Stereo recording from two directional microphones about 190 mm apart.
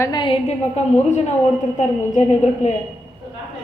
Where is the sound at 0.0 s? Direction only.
25° left (ahead or behind).